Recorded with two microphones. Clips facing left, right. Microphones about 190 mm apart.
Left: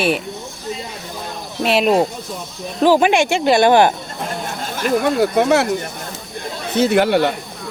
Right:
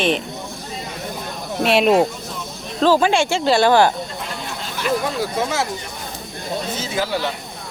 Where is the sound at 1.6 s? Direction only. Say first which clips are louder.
Even; centre (ahead or behind).